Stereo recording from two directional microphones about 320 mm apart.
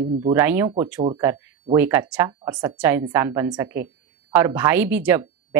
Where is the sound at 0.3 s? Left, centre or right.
Centre.